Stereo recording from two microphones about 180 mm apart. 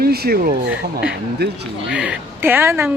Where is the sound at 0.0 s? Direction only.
60° right (ahead or behind).